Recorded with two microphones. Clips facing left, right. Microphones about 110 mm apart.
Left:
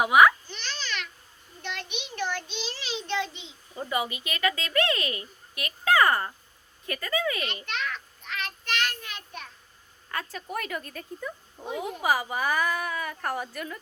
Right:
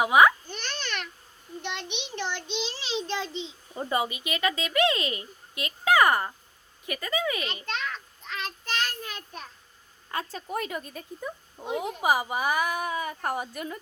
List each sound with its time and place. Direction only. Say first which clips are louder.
0.0 s a child's voice: even; 25° right (ahead or behind)
0.4 s a sound: right 2 dB; 50° right (ahead or behind)
1.6 s a child's voice: even; 25° right (ahead or behind)
4.1 s a child's voice: even; 20° right (ahead or behind)
7.6 s a child's voice: even; 35° right (ahead or behind)
8.3 s child singing: even; 30° right (ahead or behind)
10.1 s a woman's voice: right 2 dB; 25° right (ahead or behind)